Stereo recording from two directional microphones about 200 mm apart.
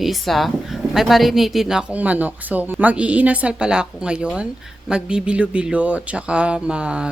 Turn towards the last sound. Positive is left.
turn(degrees=-5)  # may be behind; listen again after turning